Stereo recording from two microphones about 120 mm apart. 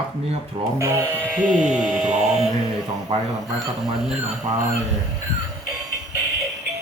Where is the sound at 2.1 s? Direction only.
85° right.